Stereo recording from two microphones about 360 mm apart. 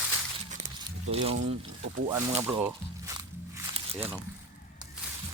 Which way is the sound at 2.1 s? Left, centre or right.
Centre.